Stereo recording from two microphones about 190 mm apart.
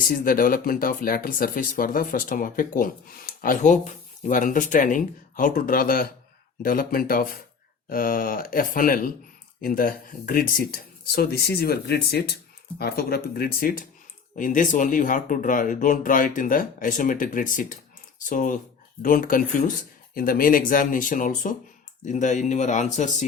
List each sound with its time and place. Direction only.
0.1 s speech: 50° left (ahead or behind)